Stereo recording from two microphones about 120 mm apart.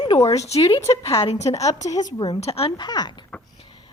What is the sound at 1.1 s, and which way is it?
Speech, 55° left (ahead or behind).